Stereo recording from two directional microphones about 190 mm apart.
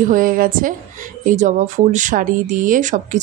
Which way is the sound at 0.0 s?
45° right (ahead or behind).